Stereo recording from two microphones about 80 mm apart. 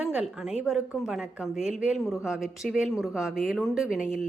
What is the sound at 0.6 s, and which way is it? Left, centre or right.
A woman's voice, centre.